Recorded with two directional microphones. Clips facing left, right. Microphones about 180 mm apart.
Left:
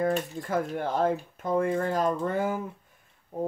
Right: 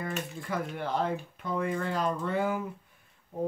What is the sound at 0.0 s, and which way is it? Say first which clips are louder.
Speech: left 8 dB; 40° left (ahead or behind).